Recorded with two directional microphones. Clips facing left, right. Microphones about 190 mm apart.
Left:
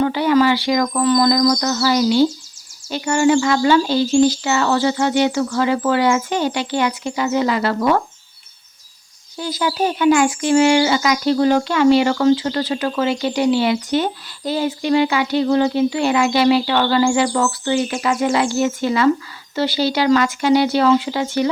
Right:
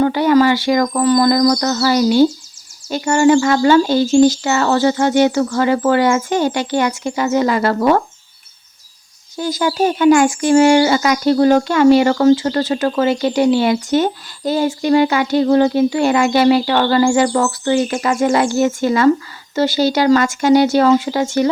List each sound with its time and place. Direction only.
0.0 s speech: 45° right (ahead or behind)
9.4 s speech: 45° right (ahead or behind)